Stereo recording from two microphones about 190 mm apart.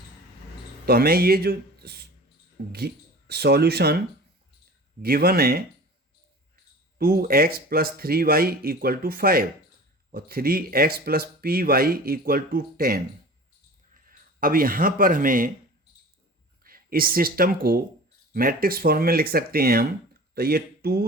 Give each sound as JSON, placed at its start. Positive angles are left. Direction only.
{"t": 0.9, "sound": "speech", "side_deg": -55}
{"t": 5.0, "sound": "speech", "side_deg": -55}
{"t": 7.0, "sound": "speech", "side_deg": -50}
{"t": 16.6, "sound": "speech", "side_deg": -50}